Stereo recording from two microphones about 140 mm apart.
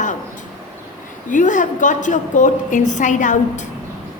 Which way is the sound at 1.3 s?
65° left (ahead or behind).